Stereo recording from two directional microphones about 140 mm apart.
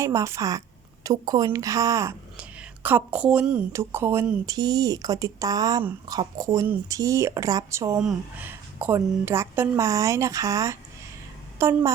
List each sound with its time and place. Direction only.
0.0 s a woman's voice: 20° right (ahead or behind)
2.4 s a woman's voice: 10° right (ahead or behind)
3.7 s a woman's voice: 20° right (ahead or behind)